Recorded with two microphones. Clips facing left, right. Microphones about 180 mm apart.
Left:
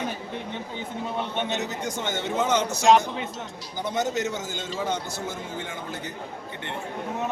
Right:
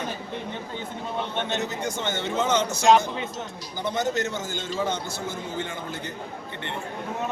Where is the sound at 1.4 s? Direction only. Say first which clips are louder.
Right 2 dB; 15° left (ahead or behind).